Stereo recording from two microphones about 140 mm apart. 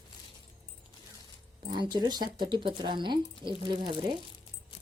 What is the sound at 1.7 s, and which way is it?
Speech, 30° right (ahead or behind).